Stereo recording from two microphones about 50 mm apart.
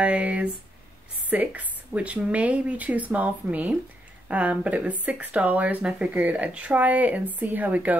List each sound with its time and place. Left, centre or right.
0.0 s speech: right